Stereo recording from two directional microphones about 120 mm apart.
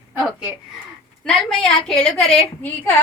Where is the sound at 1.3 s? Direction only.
Centre (ahead or behind).